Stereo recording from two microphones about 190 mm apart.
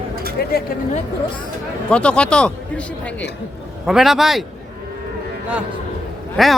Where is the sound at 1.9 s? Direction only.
5° left (ahead or behind).